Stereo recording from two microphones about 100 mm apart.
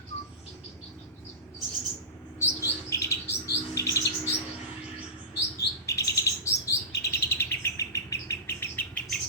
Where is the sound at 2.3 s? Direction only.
30° left (ahead or behind).